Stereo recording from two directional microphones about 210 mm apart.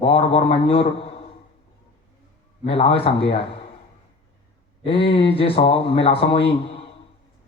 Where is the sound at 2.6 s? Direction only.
25° left (ahead or behind).